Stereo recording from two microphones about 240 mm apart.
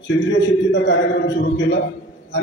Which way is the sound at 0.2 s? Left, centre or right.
Left.